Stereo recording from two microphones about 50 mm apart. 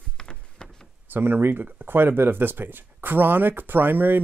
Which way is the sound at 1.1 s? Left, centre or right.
Right.